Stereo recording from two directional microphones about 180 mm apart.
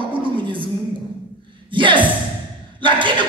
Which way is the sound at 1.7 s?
25° right (ahead or behind).